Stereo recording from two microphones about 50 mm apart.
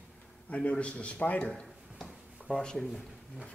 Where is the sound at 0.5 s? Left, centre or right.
Left.